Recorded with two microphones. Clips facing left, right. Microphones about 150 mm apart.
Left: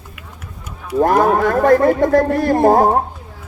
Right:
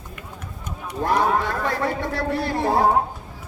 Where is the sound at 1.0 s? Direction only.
50° left (ahead or behind).